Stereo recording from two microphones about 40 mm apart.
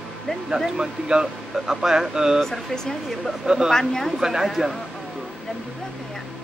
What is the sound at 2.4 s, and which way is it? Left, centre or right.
Speech, centre.